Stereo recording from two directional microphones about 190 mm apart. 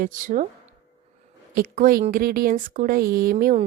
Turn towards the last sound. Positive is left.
turn(degrees=-40)  # may be behind; listen again after turning